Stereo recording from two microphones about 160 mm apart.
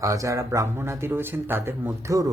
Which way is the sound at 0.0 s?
20° right (ahead or behind).